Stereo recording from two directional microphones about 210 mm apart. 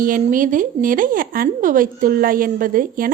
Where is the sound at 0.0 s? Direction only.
40° right (ahead or behind).